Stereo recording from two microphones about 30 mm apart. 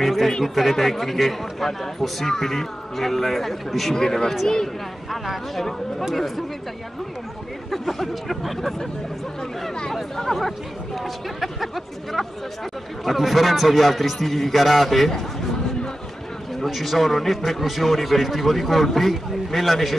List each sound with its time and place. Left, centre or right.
0.0 s music: centre
0.4 s speech: centre
2.2 s speech: centre
3.9 s speech: centre
5.1 s speech: centre
6.1 s speech: centre
7.7 s speech: centre
10.1 s speech: centre
16.6 s speech: centre